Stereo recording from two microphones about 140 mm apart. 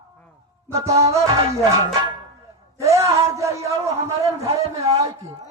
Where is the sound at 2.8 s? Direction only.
20° right (ahead or behind).